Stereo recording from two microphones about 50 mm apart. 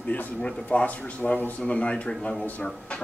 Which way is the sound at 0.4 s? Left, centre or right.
Centre.